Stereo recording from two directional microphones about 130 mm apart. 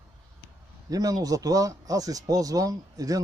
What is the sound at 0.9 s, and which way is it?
Speech, 30° right (ahead or behind).